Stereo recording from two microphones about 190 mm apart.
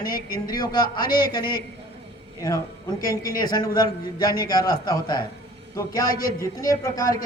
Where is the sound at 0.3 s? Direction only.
20° left (ahead or behind).